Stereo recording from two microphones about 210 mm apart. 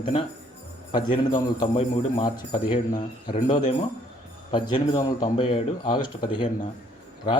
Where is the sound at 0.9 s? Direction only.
20° left (ahead or behind).